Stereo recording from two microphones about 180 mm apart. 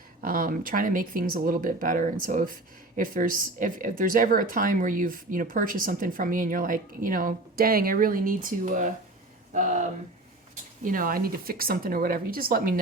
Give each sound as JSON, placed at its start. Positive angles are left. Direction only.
{"t": 0.2, "sound": "speech", "side_deg": -50}
{"t": 10.8, "sound": "speech", "side_deg": -50}